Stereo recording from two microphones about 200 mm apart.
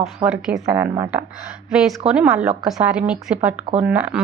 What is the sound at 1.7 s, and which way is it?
A woman's voice, centre (ahead or behind).